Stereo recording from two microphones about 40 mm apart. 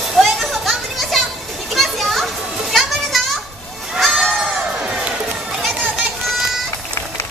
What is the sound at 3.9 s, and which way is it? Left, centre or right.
Crowd, centre.